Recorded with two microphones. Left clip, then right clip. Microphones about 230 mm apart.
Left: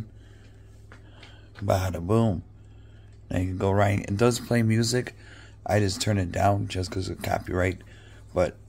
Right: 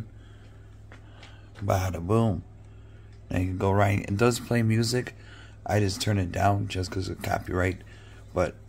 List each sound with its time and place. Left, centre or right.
1.7 s speech: centre